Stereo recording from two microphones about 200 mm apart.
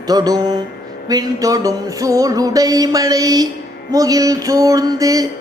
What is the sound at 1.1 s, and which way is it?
Mantra, 20° right (ahead or behind).